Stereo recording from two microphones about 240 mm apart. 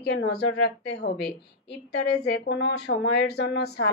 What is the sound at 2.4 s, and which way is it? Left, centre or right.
Speech, left.